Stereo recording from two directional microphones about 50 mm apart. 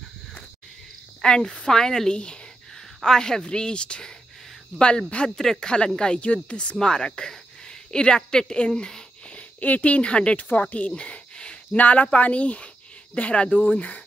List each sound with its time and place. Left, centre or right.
1.2 s speech: centre
9.6 s speech: left
10.9 s a sound: centre
11.7 s speech: left